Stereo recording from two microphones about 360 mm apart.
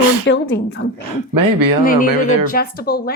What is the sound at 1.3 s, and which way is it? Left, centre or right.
Speech, right.